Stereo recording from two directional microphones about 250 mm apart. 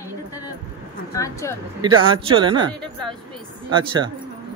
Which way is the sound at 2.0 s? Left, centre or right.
Right.